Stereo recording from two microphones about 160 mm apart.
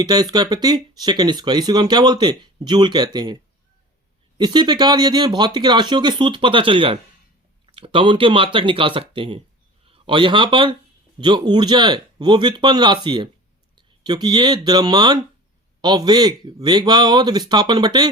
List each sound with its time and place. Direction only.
0.0 s speech: 25° right (ahead or behind)
4.4 s a man's voice: 30° right (ahead or behind)